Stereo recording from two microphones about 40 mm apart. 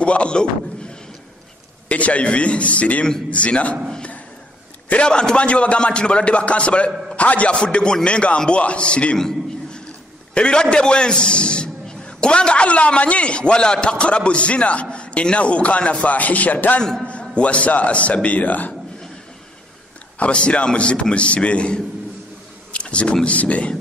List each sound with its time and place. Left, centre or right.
0.0 s a man's voice: left
1.9 s speech: left
5.0 s a man's voice: left
7.5 s a man's voice: left
9.2 s a sound: left
10.3 s a man's voice: left
16.2 s speech: left
17.0 s speech: left
20.2 s a man's voice: left
22.7 s a sound: left
23.2 s speech: left